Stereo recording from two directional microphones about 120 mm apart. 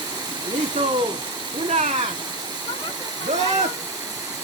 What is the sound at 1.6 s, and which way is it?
Speech, 60° right (ahead or behind).